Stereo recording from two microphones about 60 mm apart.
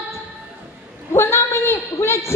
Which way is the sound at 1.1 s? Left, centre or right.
Left.